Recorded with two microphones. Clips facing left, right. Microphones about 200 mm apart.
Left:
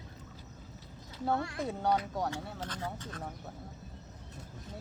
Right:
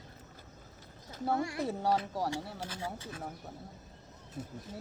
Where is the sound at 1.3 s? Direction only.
15° right (ahead or behind).